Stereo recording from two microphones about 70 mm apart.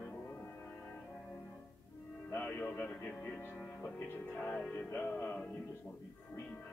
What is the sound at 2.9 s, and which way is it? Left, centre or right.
Music, centre.